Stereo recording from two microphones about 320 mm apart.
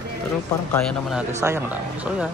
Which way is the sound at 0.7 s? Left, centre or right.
Centre.